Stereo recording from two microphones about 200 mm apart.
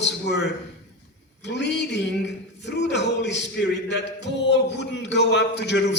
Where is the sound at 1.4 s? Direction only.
60° left (ahead or behind).